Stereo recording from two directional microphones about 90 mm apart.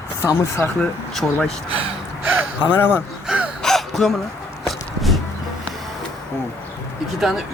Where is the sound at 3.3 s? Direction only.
10° right (ahead or behind).